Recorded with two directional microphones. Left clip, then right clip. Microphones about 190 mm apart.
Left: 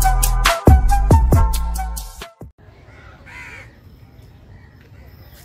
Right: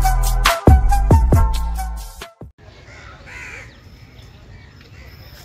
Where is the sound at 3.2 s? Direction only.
15° right (ahead or behind).